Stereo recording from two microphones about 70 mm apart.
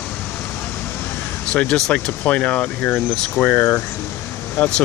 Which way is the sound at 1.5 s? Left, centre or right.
Centre.